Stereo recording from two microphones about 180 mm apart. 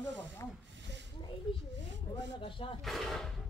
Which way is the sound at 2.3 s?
30° left (ahead or behind).